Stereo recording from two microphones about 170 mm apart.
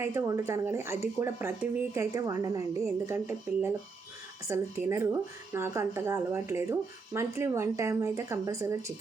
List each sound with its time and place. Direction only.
0.0 s speech: 15° right (ahead or behind)